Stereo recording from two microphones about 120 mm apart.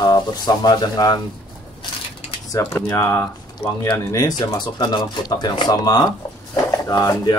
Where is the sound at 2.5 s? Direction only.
25° left (ahead or behind).